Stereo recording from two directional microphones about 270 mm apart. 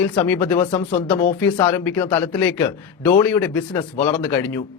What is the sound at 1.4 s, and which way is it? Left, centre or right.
Speech, centre.